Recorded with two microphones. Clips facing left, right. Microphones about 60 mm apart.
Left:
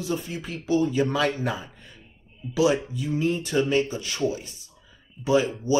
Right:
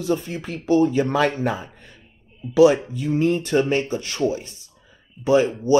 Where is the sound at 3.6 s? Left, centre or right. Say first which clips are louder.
Right 1 dB; right.